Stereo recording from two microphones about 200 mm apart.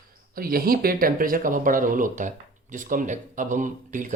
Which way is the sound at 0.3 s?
45° right (ahead or behind).